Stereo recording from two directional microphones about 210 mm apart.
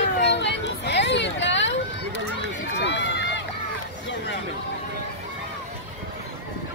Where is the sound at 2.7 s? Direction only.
60° left (ahead or behind).